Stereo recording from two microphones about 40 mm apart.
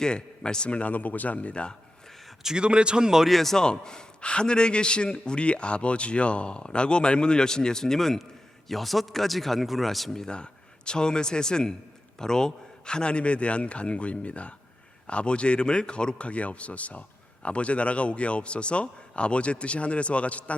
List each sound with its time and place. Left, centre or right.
0.0 s a man's voice: centre
2.6 s speech: right
3.2 s a man's voice: centre
3.6 s a man's voice: centre
10.2 s a man's voice: left